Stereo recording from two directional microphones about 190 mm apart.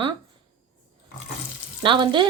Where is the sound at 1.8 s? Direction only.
25° right (ahead or behind).